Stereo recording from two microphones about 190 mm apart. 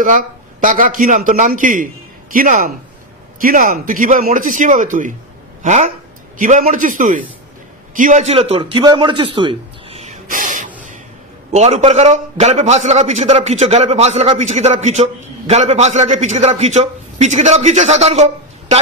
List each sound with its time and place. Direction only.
0.0 s a man's voice: 45° right (ahead or behind)